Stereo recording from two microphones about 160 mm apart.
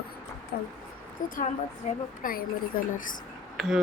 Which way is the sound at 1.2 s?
55° left (ahead or behind).